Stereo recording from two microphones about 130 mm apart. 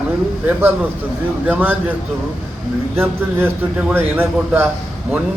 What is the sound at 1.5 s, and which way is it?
Speech, 15° right (ahead or behind).